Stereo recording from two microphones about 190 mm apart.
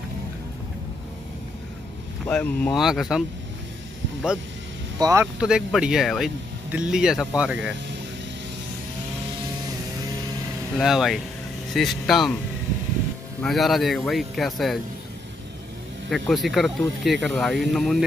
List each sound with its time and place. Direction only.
2.2 s speech: 5° left (ahead or behind)
4.9 s speech: 15° right (ahead or behind)
5.4 s speech: 5° right (ahead or behind)
10.8 s speech: centre (ahead or behind)
13.4 s speech: centre (ahead or behind)
16.1 s speech: centre (ahead or behind)